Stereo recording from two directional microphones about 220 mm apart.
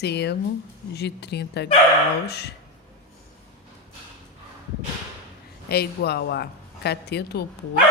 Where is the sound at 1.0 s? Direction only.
50° left (ahead or behind).